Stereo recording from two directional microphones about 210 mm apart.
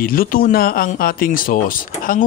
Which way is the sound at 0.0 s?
45° left (ahead or behind).